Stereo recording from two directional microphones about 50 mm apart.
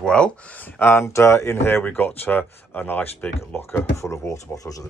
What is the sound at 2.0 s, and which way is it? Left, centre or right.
Speech, left.